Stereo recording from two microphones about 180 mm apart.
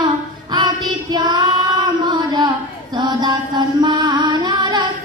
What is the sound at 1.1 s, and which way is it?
Child singing, 20° right (ahead or behind).